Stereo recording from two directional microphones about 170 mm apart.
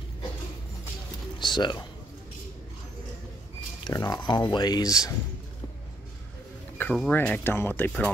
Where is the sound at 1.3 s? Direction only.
25° left (ahead or behind).